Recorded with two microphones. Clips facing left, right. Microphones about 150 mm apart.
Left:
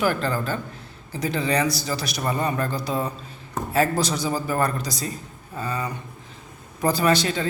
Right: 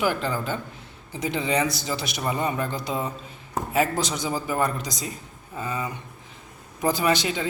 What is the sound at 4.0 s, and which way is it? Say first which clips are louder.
Speech: left 3 dB; 15° right (ahead or behind).